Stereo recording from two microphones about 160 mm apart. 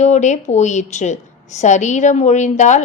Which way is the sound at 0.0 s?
45° left (ahead or behind).